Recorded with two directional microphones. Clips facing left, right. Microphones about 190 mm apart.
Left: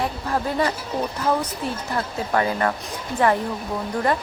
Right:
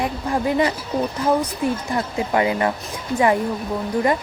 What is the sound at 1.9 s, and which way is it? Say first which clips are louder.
Speech: right 2 dB; 15° right (ahead or behind).